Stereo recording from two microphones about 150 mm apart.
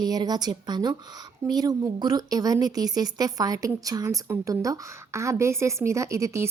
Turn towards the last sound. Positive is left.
turn(degrees=-20)  # may be behind; listen again after turning